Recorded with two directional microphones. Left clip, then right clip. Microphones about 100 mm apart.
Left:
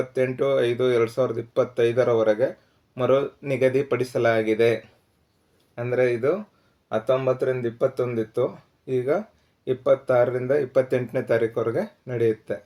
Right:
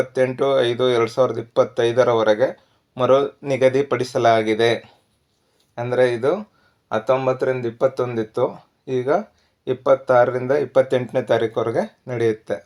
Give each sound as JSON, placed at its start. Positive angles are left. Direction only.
{"t": 0.1, "sound": "speech", "side_deg": -25}
{"t": 5.8, "sound": "speech", "side_deg": -20}